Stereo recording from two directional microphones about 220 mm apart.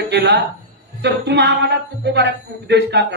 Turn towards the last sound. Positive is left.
turn(degrees=-50)  # may be behind; listen again after turning